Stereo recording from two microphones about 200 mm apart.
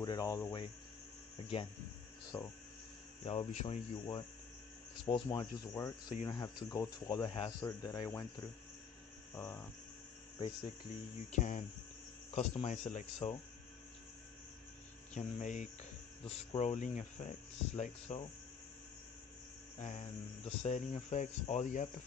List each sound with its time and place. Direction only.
0.0 s speech: 20° left (ahead or behind)
2.3 s speech: 25° left (ahead or behind)
9.3 s a sound: 10° left (ahead or behind)
11.3 s speech: 35° left (ahead or behind)
15.1 s speech: 40° left (ahead or behind)
19.8 s speech: 35° left (ahead or behind)